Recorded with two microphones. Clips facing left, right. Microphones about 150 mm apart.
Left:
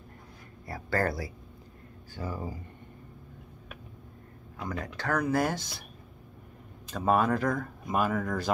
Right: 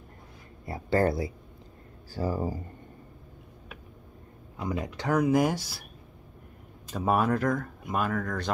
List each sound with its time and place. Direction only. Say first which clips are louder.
0.7 s speech: right 4 dB; 20° right (ahead or behind)
2.1 s speech: right 7 dB; 40° right (ahead or behind)
4.6 s speech: right 4 dB; 20° right (ahead or behind)
6.9 s speech: even; 10° right (ahead or behind)